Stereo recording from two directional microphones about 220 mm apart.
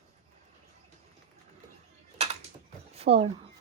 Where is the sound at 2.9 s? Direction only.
25° right (ahead or behind).